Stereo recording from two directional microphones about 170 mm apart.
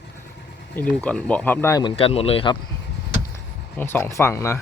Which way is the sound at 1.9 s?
35° left (ahead or behind).